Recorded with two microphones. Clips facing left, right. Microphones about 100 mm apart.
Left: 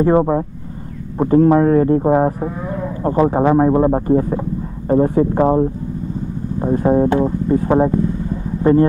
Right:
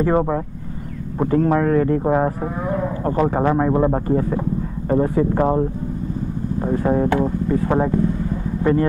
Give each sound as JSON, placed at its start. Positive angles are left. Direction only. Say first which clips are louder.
{"t": 0.1, "sound": "speech", "louder": "left 4 dB", "side_deg": 20}
{"t": 1.3, "sound": "speech", "louder": "left 6 dB", "side_deg": 30}
{"t": 5.4, "sound": "speech", "louder": "left 5 dB", "side_deg": 15}
{"t": 6.7, "sound": "speech", "louder": "left 4 dB", "side_deg": 25}